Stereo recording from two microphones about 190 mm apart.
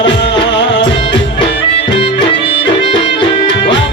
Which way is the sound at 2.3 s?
25° left (ahead or behind).